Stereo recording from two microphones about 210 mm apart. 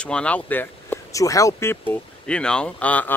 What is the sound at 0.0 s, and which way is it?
Speech, 5° left (ahead or behind).